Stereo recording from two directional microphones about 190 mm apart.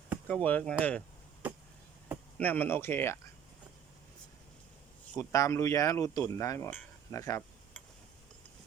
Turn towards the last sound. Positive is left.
turn(degrees=15)  # may be behind; listen again after turning